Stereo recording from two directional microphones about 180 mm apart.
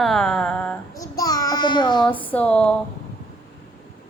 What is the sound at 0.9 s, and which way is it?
Child singing, 20° left (ahead or behind).